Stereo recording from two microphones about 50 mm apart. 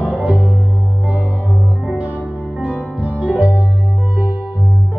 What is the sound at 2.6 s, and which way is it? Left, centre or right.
Music, right.